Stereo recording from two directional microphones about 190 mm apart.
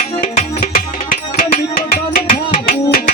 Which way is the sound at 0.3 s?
45° left (ahead or behind).